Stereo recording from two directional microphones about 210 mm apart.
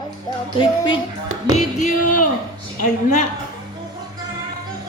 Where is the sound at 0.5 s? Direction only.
25° left (ahead or behind).